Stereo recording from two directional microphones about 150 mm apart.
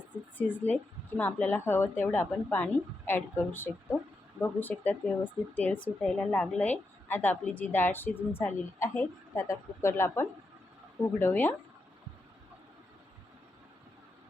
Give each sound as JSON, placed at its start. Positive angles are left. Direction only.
{"t": 0.3, "sound": "speech", "side_deg": 10}